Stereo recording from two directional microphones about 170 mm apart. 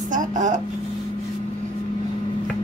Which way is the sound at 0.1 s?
50° right (ahead or behind).